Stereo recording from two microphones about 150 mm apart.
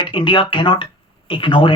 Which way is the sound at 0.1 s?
35° left (ahead or behind).